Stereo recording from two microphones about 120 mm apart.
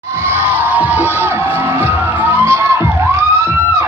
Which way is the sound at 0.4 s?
15° right (ahead or behind).